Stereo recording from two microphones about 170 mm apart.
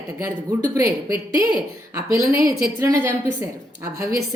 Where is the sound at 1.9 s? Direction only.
15° right (ahead or behind).